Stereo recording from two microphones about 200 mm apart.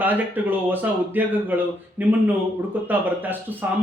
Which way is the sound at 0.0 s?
10° right (ahead or behind).